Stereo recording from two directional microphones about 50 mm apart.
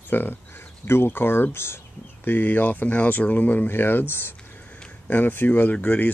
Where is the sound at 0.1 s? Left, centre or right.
Left.